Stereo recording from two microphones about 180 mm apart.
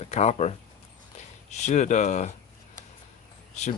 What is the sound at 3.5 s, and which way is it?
Speech, 40° left (ahead or behind).